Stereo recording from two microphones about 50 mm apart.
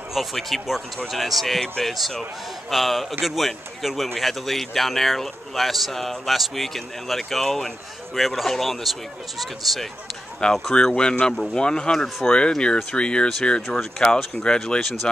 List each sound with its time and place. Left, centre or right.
0.1 s speech: centre
1.6 s speech: centre
10.4 s speech: centre
14.8 s speech: centre